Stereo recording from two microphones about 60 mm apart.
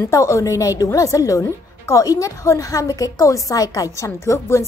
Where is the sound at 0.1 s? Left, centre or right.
Left.